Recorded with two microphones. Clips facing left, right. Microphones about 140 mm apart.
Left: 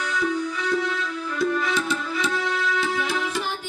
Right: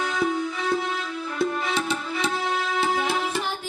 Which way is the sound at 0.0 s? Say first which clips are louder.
Right 1 dB; 25° right (ahead or behind).